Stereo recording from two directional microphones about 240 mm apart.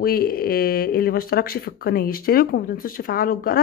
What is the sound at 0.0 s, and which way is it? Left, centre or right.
Speech, left.